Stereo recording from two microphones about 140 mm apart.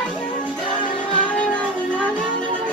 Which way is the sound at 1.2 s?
10° left (ahead or behind).